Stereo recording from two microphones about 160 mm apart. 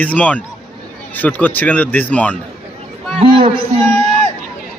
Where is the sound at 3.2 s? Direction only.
35° right (ahead or behind).